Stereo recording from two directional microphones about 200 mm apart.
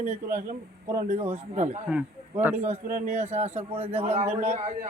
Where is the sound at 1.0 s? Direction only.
30° right (ahead or behind).